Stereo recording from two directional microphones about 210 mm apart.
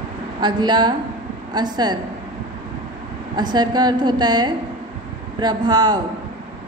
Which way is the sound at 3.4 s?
20° right (ahead or behind).